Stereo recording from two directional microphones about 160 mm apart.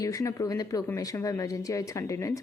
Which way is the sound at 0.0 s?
20° left (ahead or behind).